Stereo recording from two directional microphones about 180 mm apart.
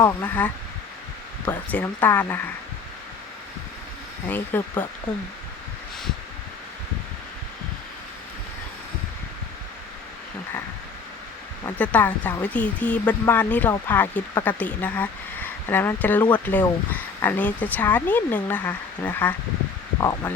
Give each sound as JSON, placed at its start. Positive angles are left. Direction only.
{"t": 0.0, "sound": "speech", "side_deg": 10}
{"t": 4.3, "sound": "speech", "side_deg": 10}
{"t": 11.8, "sound": "speech", "side_deg": 10}